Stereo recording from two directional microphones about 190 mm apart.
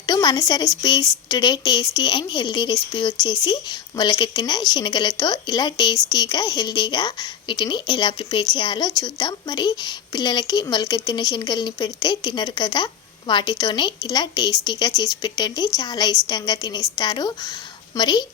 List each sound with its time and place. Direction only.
0.0 s a woman's voice: 20° left (ahead or behind)